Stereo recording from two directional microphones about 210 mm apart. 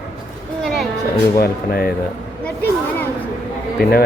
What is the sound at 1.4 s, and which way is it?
Speech, 45° left (ahead or behind).